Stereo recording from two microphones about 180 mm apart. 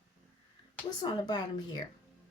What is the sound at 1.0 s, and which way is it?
Speech, 25° left (ahead or behind).